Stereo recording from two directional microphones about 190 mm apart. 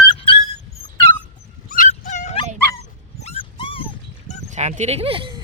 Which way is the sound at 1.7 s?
40° left (ahead or behind).